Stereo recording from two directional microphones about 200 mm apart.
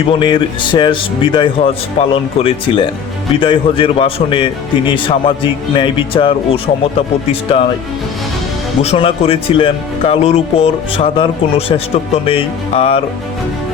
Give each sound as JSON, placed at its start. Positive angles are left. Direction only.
{"t": 0.1, "sound": "speech", "side_deg": 25}
{"t": 8.8, "sound": "speech", "side_deg": 30}